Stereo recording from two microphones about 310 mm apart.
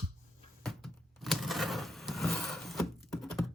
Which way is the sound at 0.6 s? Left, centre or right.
Centre.